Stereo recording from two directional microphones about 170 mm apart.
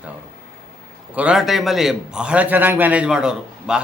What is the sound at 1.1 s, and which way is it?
A man's voice, 5° right (ahead or behind).